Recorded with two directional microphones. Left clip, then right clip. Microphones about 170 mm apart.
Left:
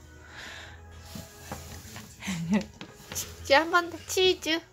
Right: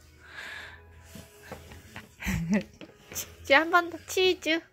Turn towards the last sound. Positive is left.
turn(degrees=-20)  # may be behind; listen again after turning